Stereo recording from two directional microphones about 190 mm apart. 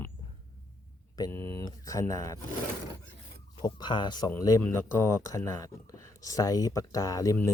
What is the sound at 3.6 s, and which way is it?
Speech, 25° left (ahead or behind).